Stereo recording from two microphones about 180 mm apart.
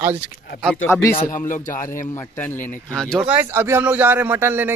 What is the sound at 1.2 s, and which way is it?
Speech, 45° left (ahead or behind).